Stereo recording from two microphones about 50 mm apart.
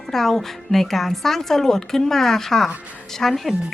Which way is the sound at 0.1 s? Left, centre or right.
Centre.